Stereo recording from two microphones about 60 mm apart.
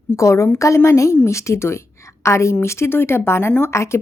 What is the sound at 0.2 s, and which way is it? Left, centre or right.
A woman's voice, left.